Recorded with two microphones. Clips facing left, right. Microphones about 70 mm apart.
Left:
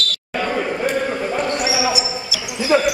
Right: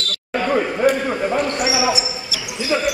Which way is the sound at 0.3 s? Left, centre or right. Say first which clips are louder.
Right 3 dB; centre.